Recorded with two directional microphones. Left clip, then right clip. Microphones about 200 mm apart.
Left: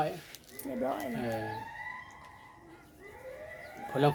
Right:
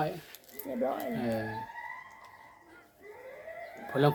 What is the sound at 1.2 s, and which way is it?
Speech, 15° right (ahead or behind).